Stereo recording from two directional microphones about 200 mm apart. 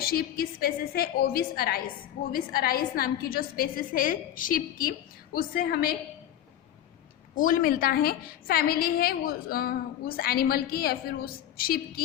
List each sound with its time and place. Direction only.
0.0 s a woman's voice: 50° left (ahead or behind)
7.3 s a woman's voice: 45° left (ahead or behind)